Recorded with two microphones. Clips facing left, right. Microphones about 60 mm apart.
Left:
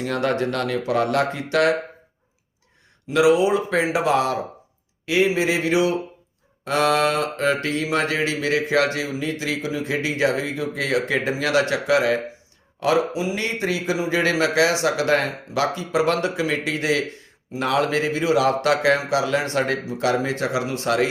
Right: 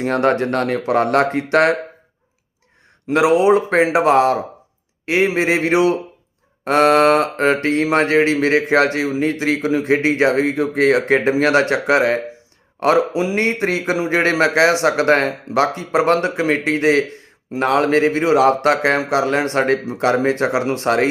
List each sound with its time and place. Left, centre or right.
0.0 s speech: right
1.0 s mantra: right
3.1 s mantra: right
12.8 s mantra: right